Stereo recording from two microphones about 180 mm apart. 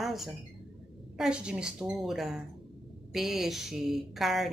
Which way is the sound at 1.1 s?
5° right (ahead or behind).